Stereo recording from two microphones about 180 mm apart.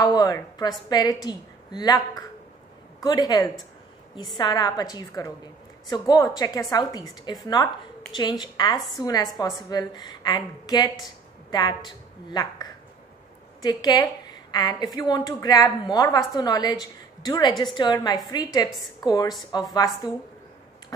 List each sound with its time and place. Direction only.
0.0 s a woman's voice: 20° left (ahead or behind)